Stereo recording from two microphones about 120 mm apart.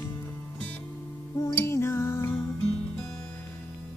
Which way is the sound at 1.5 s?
20° left (ahead or behind).